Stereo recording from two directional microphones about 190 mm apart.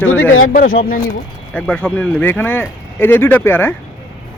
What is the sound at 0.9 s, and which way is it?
Speech, 50° left (ahead or behind).